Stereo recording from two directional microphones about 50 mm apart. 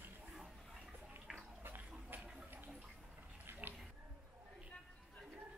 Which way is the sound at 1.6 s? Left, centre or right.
Right.